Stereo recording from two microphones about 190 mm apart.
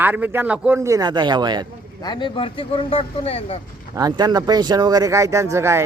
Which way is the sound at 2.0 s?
25° left (ahead or behind).